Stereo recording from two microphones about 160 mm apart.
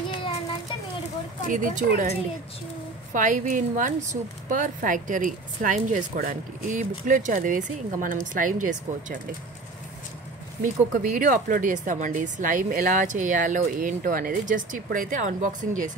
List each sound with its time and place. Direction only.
1.5 s a woman's voice: 55° right (ahead or behind)
10.6 s a woman's voice: 55° right (ahead or behind)